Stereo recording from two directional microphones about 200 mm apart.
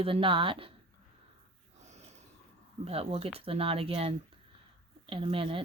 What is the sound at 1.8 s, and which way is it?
Snort, 35° right (ahead or behind).